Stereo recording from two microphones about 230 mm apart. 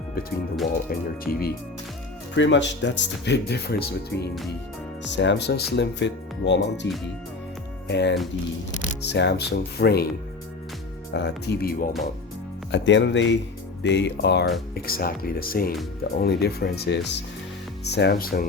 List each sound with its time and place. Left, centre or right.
0.9 s speech: left
2.3 s speech: left
7.9 s speech: left
11.1 s speech: left